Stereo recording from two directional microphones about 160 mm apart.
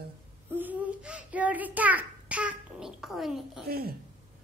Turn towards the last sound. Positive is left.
turn(degrees=-75)  # may be behind; listen again after turning